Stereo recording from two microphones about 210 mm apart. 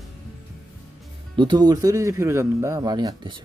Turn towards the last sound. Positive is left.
turn(degrees=-20)  # may be behind; listen again after turning